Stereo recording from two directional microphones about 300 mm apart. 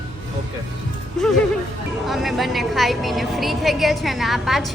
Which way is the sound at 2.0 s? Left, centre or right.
Centre.